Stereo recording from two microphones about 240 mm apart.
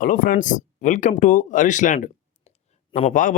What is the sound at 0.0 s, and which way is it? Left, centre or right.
Speech, left.